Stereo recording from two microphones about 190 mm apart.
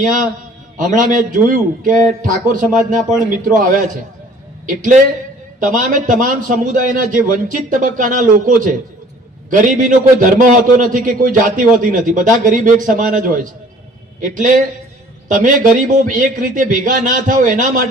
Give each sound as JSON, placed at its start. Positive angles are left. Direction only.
{"t": 0.0, "sound": "a man's voice", "side_deg": -45}